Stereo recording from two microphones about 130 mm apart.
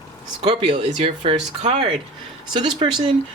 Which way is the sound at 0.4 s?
50° right (ahead or behind).